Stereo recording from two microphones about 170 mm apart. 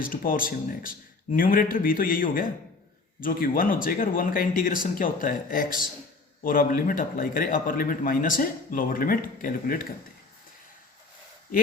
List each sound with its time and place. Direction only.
0.0 s a man's voice: 55° left (ahead or behind)